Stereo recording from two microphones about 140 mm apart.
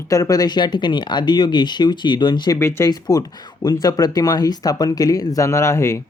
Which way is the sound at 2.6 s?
20° left (ahead or behind).